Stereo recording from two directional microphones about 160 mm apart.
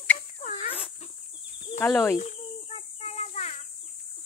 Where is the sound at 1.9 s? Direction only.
10° left (ahead or behind).